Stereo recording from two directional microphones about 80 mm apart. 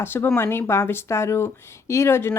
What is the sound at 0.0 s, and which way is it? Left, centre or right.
Speech, left.